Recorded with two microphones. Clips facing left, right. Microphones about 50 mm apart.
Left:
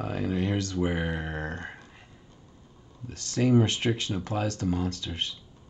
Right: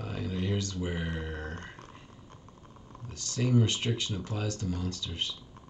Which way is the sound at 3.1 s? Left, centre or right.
Left.